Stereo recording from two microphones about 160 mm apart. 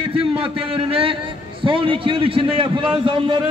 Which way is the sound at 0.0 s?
35° right (ahead or behind).